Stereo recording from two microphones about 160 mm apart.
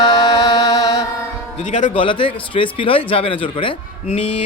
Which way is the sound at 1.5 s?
50° left (ahead or behind).